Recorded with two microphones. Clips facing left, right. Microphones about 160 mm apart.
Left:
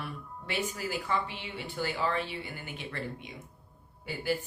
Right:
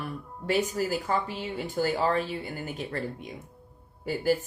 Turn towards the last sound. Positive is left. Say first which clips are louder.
# right 6 dB
turn(degrees=-40)  # may be behind; listen again after turning